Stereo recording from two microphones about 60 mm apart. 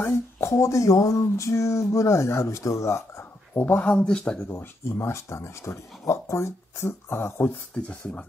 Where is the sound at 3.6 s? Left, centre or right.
Left.